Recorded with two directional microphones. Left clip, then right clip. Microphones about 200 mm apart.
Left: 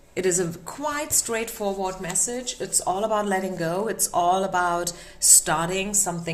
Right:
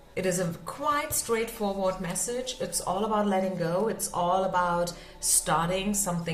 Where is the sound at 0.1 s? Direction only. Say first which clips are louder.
Left 4 dB; 45° left (ahead or behind).